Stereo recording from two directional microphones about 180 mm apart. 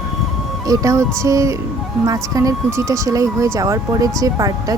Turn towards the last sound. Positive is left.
turn(degrees=-20)  # may be behind; listen again after turning